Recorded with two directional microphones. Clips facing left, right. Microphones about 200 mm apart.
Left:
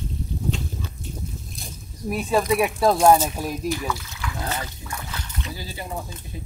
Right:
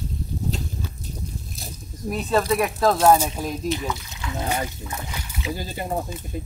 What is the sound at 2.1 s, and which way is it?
Speech, 10° left (ahead or behind).